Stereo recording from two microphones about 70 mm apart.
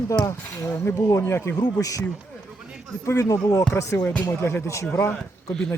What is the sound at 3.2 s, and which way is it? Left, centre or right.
Speech, left.